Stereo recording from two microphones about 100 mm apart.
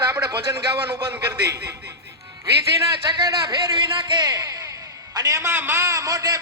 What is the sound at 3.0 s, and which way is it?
A man's voice, 50° right (ahead or behind).